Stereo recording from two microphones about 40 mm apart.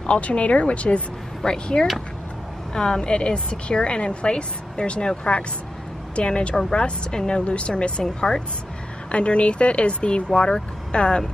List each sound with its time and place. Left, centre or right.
0.0 s speech: left
1.4 s a woman's voice: centre
9.1 s a woman's voice: left